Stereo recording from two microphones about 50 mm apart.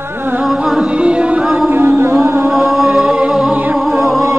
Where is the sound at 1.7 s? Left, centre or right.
Right.